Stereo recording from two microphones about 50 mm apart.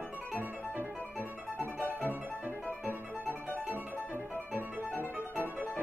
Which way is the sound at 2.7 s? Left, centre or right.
Right.